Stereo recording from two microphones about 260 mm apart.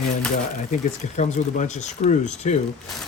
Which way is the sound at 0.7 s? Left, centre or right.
Left.